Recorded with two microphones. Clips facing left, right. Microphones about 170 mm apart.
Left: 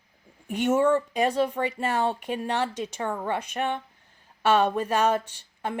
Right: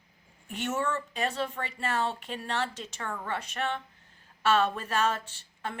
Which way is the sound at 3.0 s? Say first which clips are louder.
Left 6 dB; 20° left (ahead or behind).